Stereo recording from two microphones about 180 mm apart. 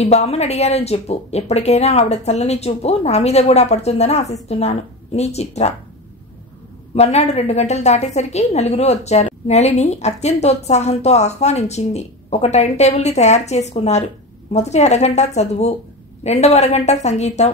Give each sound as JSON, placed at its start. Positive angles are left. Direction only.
{"t": 0.0, "sound": "a woman's voice", "side_deg": 35}
{"t": 7.0, "sound": "a woman's voice", "side_deg": 35}